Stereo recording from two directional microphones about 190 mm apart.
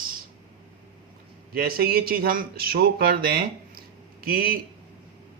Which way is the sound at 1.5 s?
50° right (ahead or behind).